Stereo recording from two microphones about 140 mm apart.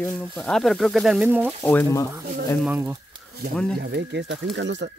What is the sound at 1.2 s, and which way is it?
Speech, 15° right (ahead or behind).